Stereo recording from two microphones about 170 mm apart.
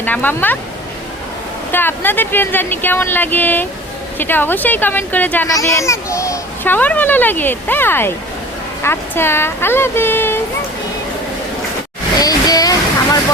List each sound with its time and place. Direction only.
0.0 s speech: 10° left (ahead or behind)
1.7 s a child's voice: 10° left (ahead or behind)
12.2 s a sound: 20° left (ahead or behind)